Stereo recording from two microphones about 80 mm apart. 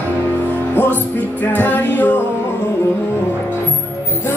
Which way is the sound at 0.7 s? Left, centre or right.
Left.